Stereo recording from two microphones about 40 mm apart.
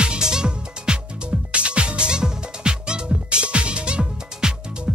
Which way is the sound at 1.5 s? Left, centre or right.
Right.